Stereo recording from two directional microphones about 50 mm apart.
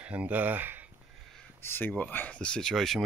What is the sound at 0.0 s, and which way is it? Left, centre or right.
Speech, right.